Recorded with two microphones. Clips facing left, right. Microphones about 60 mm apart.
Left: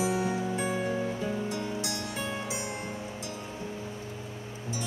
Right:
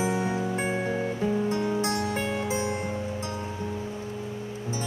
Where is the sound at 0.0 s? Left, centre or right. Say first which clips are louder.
Right 2 dB; right.